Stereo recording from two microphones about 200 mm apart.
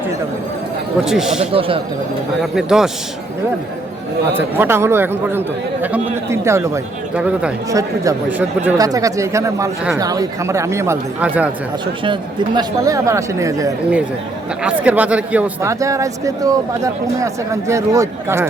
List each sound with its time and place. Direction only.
1.0 s a man's voice: centre (ahead or behind)
1.5 s speech: 25° right (ahead or behind)
2.4 s a man's voice: 5° right (ahead or behind)
4.4 s speech: 10° right (ahead or behind)
7.7 s speech: 15° right (ahead or behind)
12.5 s speech: 15° right (ahead or behind)